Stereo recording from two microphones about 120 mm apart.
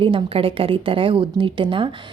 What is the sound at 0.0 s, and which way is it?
A woman's voice, 45° right (ahead or behind).